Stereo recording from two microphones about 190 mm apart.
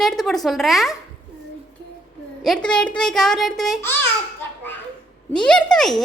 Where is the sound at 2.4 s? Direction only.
5° left (ahead or behind).